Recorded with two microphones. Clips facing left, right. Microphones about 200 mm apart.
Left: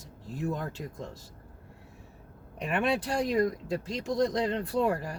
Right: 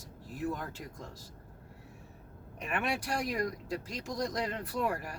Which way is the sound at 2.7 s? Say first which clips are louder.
Left 6 dB; 20° left (ahead or behind).